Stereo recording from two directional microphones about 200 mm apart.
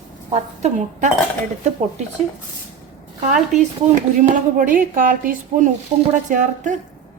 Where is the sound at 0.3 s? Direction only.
35° right (ahead or behind).